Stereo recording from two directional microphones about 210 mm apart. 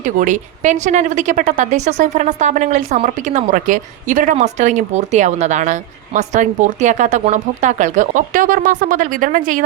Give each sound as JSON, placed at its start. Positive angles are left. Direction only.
{"t": 0.0, "sound": "speech", "side_deg": -35}